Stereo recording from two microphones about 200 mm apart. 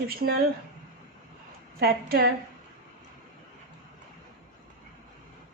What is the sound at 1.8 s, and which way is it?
Speech, 50° right (ahead or behind).